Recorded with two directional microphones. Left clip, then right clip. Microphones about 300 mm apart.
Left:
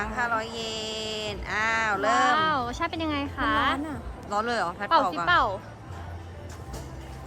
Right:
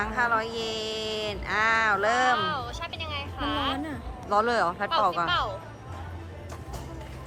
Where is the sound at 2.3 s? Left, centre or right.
Left.